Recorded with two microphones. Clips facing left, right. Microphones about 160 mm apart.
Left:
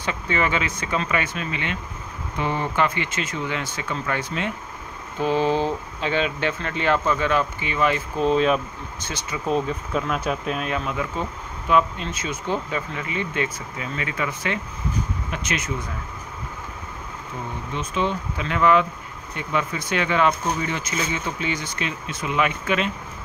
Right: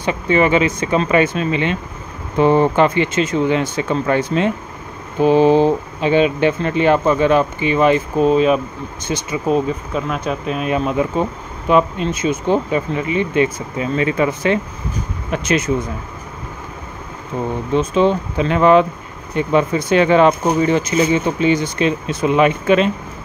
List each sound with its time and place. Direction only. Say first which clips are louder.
0.0 s speech: right 9 dB; 20° right (ahead or behind)
5.2 s speech: right 9 dB; 15° right (ahead or behind)
8.2 s speech: right 4 dB; 5° right (ahead or behind)
10.7 s speech: right 9 dB; 25° right (ahead or behind)
17.7 s speech: right 10 dB; 30° right (ahead or behind)